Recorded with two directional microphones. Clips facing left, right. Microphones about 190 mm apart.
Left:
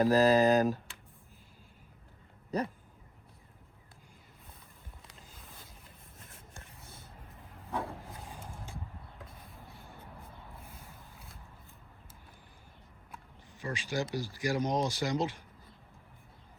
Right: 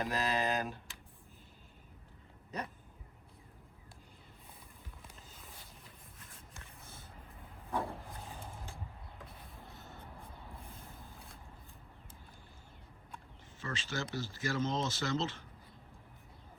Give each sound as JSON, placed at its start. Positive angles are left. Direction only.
{"t": 0.0, "sound": "speech", "side_deg": 35}
{"t": 2.5, "sound": "speech", "side_deg": 35}
{"t": 7.7, "sound": "wood", "side_deg": 0}
{"t": 9.7, "sound": "music", "side_deg": 10}
{"t": 13.6, "sound": "speech", "side_deg": 15}